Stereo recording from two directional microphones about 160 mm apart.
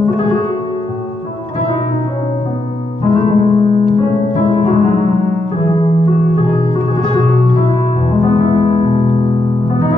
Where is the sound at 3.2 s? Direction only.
35° left (ahead or behind).